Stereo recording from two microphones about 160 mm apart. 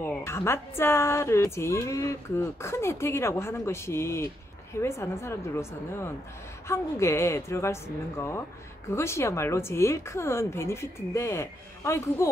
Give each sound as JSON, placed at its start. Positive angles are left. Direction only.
{"t": 0.0, "sound": "a woman's voice", "side_deg": 15}